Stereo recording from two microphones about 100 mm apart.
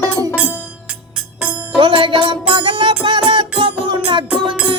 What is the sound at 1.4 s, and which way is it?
Music, 10° right (ahead or behind).